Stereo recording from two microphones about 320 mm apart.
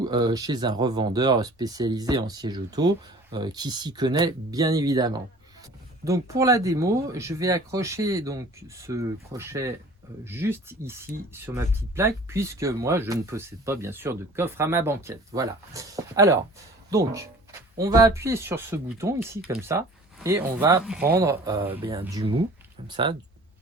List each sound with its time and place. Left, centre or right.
0.0 s speech: centre